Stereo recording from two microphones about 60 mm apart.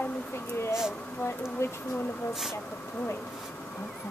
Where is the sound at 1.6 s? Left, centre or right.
Left.